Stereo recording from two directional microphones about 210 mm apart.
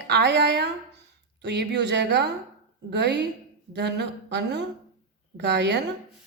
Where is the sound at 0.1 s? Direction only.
55° right (ahead or behind).